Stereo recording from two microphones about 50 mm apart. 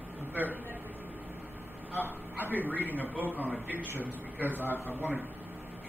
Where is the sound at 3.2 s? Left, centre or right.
Right.